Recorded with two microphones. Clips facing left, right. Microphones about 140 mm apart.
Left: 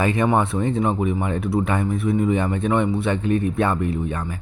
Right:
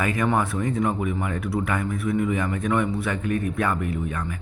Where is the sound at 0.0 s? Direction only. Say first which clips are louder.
Left 4 dB; 25° left (ahead or behind).